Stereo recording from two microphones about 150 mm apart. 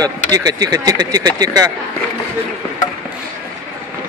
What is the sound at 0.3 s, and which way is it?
Speech, 25° right (ahead or behind).